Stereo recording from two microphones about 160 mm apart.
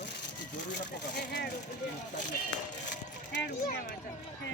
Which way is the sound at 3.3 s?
90° left.